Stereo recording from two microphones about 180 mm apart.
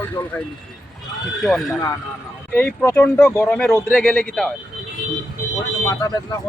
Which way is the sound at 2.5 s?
10° left (ahead or behind).